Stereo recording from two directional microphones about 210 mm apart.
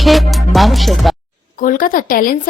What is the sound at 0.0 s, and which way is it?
Speech, centre (ahead or behind).